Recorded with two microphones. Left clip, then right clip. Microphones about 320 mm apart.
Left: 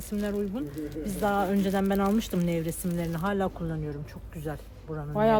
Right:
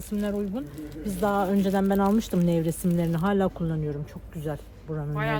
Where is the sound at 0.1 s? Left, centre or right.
Centre.